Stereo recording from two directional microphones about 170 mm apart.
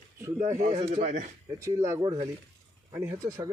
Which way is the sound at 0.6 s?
45° right (ahead or behind).